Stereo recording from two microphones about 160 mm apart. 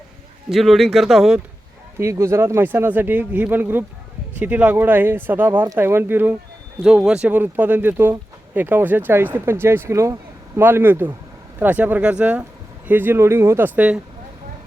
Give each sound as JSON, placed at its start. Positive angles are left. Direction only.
{"t": 0.5, "sound": "speech", "side_deg": 0}
{"t": 2.0, "sound": "speech", "side_deg": -15}